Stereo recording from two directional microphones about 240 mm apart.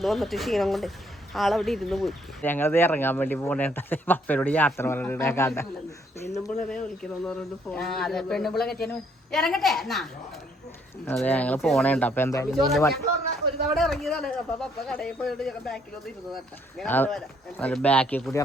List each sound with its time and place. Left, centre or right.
0.0 s speech: centre
12.5 s speech: centre